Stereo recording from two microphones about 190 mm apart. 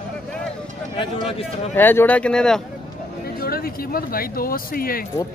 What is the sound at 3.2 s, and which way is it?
Speech, 50° left (ahead or behind).